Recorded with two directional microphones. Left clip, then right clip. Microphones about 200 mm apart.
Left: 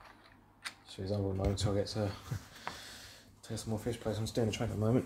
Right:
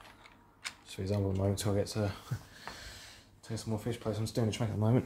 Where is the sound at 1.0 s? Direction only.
30° right (ahead or behind).